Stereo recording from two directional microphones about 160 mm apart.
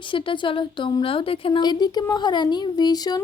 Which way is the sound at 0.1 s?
30° left (ahead or behind).